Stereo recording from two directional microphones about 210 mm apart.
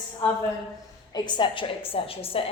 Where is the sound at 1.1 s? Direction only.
20° left (ahead or behind).